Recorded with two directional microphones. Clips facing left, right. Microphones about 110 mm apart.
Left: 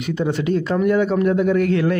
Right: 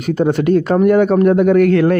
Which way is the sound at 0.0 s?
50° right (ahead or behind).